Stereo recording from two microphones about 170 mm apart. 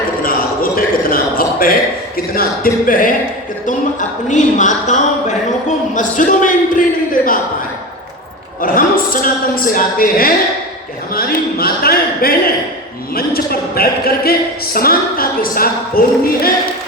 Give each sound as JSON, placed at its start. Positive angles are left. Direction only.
{"t": 0.2, "sound": "a sound", "side_deg": 60}
{"t": 4.3, "sound": "speech", "side_deg": 45}
{"t": 8.6, "sound": "speech", "side_deg": 55}